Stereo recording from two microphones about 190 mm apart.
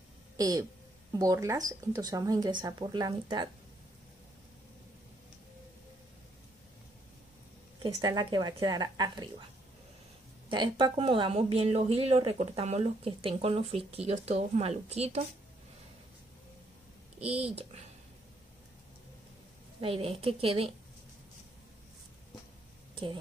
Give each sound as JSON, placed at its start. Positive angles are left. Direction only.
{"t": 0.4, "sound": "speech", "side_deg": -20}
{"t": 7.8, "sound": "speech", "side_deg": -20}
{"t": 10.5, "sound": "speech", "side_deg": -25}
{"t": 17.2, "sound": "a woman's voice", "side_deg": -30}
{"t": 19.8, "sound": "speech", "side_deg": -30}